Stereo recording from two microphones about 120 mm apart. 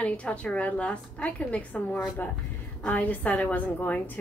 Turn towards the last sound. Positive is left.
turn(degrees=15)  # may be behind; listen again after turning